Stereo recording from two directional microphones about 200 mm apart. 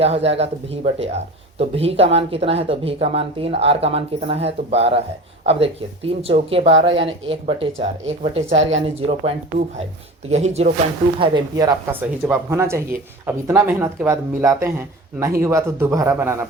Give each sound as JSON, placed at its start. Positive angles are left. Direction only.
{"t": 0.0, "sound": "speech", "side_deg": -30}
{"t": 11.2, "sound": "speech", "side_deg": -20}